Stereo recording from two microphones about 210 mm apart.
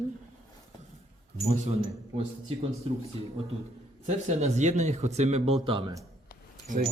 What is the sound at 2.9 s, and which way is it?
Speech, 25° right (ahead or behind).